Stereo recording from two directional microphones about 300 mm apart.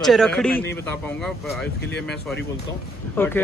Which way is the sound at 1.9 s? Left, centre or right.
Left.